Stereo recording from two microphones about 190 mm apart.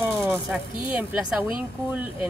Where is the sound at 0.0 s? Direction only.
15° right (ahead or behind).